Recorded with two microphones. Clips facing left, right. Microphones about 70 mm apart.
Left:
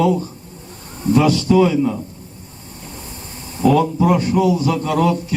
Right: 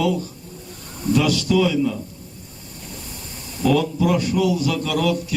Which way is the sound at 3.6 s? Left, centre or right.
Left.